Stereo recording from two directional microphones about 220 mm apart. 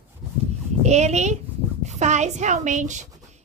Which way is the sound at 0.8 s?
30° right (ahead or behind).